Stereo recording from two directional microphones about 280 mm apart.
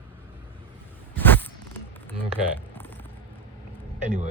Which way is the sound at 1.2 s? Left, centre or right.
Centre.